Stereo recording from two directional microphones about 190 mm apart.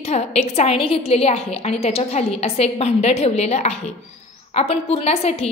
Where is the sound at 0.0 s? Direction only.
35° left (ahead or behind).